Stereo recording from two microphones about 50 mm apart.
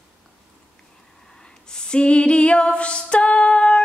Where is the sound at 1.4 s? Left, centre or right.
Centre.